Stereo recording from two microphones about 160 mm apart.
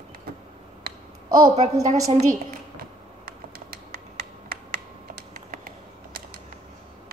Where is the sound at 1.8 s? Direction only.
20° right (ahead or behind).